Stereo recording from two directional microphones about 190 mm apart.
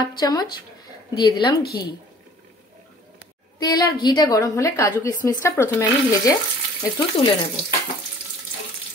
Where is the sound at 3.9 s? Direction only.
20° left (ahead or behind).